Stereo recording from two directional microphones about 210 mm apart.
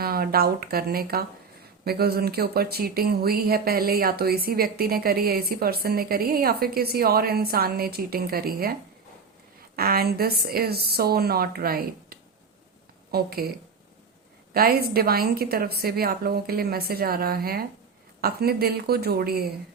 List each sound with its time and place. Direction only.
0.0 s speech: 45° right (ahead or behind)
9.7 s speech: 45° right (ahead or behind)
14.5 s speech: 45° right (ahead or behind)